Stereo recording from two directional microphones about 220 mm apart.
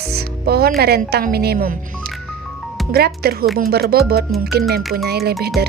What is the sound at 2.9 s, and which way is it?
A woman's voice, 45° right (ahead or behind).